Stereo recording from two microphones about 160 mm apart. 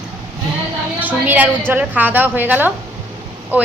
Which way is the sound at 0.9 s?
10° right (ahead or behind).